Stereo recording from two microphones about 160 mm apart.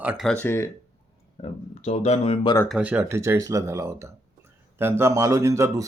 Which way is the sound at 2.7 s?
10° right (ahead or behind).